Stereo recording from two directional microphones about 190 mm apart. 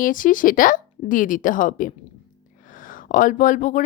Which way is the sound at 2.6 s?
45° left (ahead or behind).